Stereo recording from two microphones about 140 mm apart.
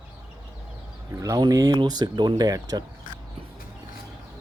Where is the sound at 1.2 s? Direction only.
25° right (ahead or behind).